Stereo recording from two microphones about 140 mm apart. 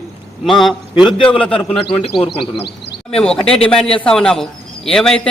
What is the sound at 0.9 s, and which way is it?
A man's voice, 35° left (ahead or behind).